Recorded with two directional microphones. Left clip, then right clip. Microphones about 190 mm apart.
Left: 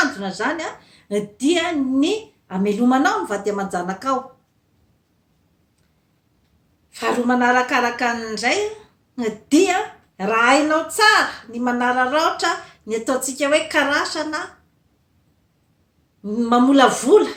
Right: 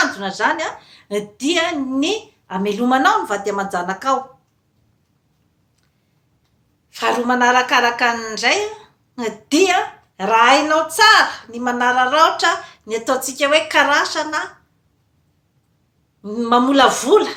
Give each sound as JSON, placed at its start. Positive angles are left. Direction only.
{"t": 0.0, "sound": "a woman's voice", "side_deg": 15}
{"t": 6.9, "sound": "a woman's voice", "side_deg": 15}
{"t": 16.2, "sound": "a woman's voice", "side_deg": 15}